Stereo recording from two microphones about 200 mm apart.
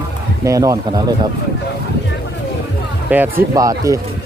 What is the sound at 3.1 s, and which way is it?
Speech, 10° right (ahead or behind).